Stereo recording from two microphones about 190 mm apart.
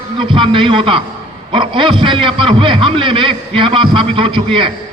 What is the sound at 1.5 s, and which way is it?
A man's voice, 25° right (ahead or behind).